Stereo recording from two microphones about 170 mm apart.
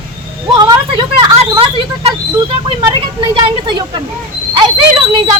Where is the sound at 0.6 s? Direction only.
25° right (ahead or behind).